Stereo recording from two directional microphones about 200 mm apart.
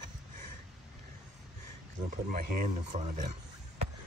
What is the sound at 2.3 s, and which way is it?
Speech, 40° right (ahead or behind).